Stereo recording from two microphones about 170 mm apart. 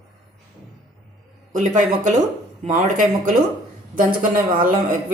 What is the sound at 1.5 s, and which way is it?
Speech, 45° right (ahead or behind).